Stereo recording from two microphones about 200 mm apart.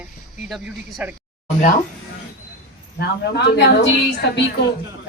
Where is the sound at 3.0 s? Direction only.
55° left (ahead or behind).